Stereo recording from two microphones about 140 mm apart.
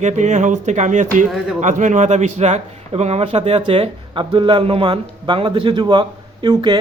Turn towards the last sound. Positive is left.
turn(degrees=-30)  # may be behind; listen again after turning